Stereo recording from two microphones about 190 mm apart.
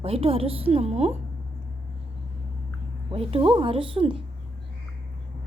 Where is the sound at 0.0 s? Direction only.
30° right (ahead or behind).